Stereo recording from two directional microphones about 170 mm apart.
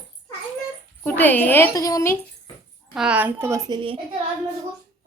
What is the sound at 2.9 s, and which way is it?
Speech, 5° right (ahead or behind).